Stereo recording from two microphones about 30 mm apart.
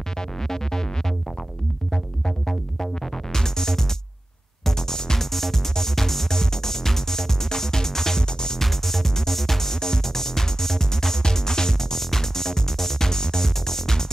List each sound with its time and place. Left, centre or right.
0.4 s music: centre
2.2 s music: centre
8.6 s music: centre